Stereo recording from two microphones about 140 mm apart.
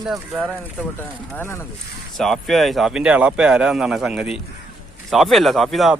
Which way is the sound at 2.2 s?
Centre (ahead or behind).